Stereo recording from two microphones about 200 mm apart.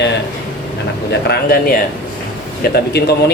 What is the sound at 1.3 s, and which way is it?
Speech, 50° left (ahead or behind).